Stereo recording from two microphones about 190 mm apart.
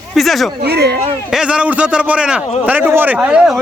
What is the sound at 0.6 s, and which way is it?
Speech, 60° right (ahead or behind).